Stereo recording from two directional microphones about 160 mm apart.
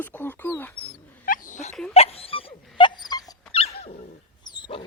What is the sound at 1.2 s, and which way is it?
Dog, 55° left (ahead or behind).